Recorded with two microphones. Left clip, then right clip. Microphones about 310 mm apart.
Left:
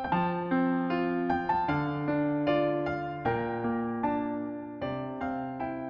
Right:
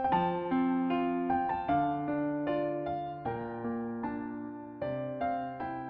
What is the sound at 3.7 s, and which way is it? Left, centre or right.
Music, left.